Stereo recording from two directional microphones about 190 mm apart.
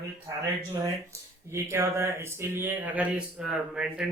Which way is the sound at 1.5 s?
15° right (ahead or behind).